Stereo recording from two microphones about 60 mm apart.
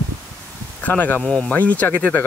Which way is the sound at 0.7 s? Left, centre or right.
Left.